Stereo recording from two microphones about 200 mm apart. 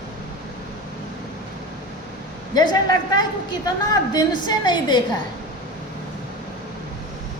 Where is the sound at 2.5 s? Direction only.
20° left (ahead or behind).